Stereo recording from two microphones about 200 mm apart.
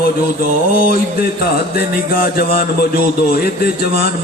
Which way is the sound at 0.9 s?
50° left (ahead or behind).